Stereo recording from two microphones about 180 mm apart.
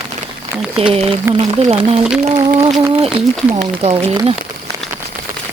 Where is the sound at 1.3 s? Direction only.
35° right (ahead or behind).